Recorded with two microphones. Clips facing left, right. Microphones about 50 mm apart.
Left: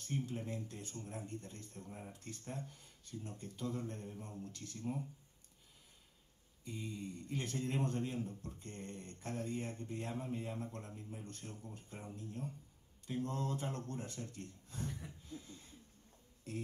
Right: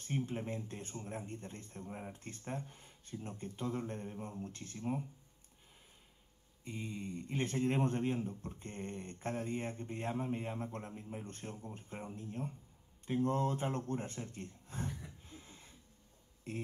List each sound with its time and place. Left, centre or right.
0.0 s speech: right
6.6 s speech: right
15.2 s a sound: right
16.5 s speech: right